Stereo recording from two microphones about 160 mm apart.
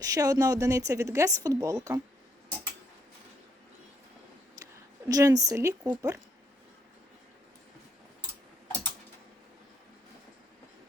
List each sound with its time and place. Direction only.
0.0 s speech: 20° right (ahead or behind)
4.6 s speech: 20° right (ahead or behind)